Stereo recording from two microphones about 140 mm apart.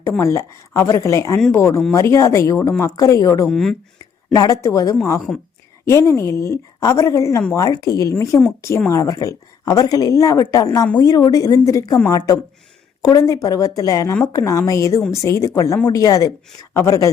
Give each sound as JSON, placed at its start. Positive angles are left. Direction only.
{"t": 0.2, "sound": "speech", "side_deg": 20}
{"t": 3.5, "sound": "speech", "side_deg": 0}
{"t": 4.4, "sound": "speech", "side_deg": 25}